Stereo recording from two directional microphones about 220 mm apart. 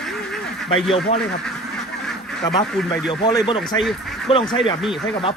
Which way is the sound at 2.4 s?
15° left (ahead or behind).